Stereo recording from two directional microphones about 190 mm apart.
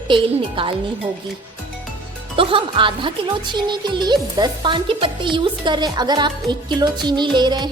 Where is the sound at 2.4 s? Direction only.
25° right (ahead or behind).